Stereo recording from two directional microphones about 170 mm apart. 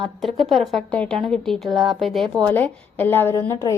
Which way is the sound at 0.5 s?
Centre (ahead or behind).